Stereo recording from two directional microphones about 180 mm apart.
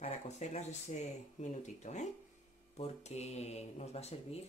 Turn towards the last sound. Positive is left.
turn(degrees=35)  # may be behind; listen again after turning